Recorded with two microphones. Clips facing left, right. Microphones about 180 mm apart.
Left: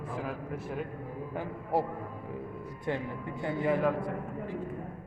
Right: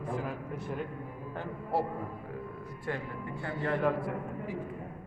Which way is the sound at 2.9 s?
20° left (ahead or behind).